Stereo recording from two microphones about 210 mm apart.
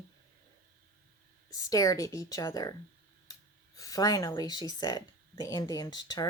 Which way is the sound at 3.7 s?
15° left (ahead or behind).